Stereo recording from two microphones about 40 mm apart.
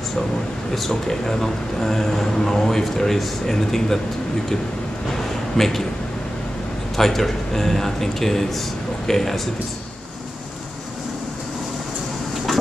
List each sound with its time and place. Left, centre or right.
0.7 s speech: centre
5.1 s a sound: centre
7.0 s speech: centre